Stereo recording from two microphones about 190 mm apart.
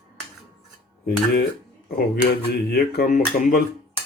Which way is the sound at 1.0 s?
55° left (ahead or behind).